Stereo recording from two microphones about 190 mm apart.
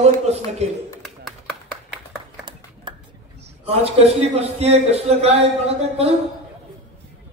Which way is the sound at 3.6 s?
30° right (ahead or behind).